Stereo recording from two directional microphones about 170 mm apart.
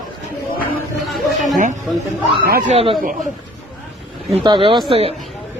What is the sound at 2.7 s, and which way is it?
Speech, 30° right (ahead or behind).